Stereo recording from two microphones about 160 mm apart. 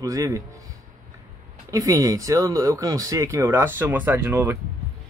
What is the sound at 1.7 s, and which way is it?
Speech, 20° right (ahead or behind).